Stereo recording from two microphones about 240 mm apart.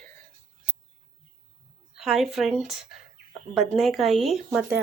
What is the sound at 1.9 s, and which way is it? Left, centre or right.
Speech, centre.